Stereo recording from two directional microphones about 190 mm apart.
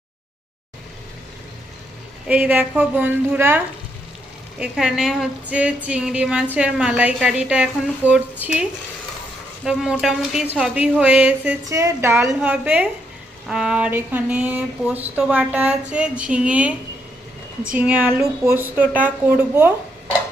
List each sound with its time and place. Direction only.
2.2 s speech: 5° right (ahead or behind)
4.6 s speech: 5° right (ahead or behind)
9.6 s speech: 5° right (ahead or behind)